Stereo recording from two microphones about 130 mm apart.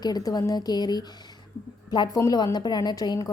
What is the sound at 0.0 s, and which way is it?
A woman's voice, 30° left (ahead or behind).